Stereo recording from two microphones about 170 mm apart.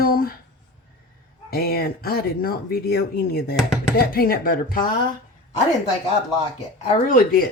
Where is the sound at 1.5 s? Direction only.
65° left (ahead or behind).